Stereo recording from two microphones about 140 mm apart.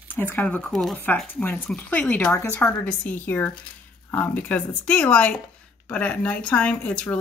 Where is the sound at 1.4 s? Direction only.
10° left (ahead or behind).